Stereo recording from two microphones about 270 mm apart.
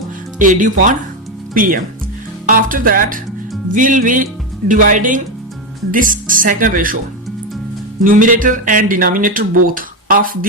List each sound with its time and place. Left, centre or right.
0.3 s speech: right
8.0 s speech: right